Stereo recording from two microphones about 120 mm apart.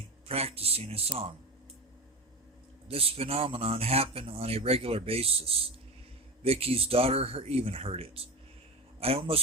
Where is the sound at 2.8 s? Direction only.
55° right (ahead or behind).